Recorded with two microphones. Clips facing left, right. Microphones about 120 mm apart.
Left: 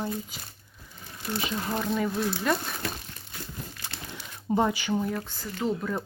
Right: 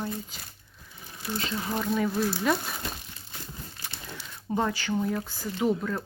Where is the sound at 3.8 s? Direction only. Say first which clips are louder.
Left 1 dB; 15° left (ahead or behind).